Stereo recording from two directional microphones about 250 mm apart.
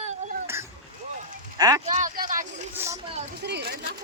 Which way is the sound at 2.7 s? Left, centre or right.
Centre.